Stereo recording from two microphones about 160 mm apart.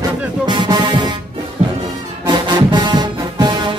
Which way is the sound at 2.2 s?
30° right (ahead or behind).